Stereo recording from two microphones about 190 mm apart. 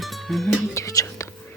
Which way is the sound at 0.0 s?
Centre (ahead or behind).